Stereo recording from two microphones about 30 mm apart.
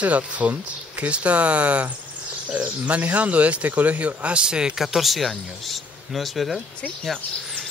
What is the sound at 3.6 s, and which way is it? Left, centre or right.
Speech, right.